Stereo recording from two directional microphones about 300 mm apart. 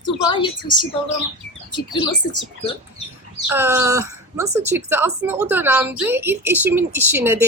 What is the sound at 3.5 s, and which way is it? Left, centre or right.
Speech, centre.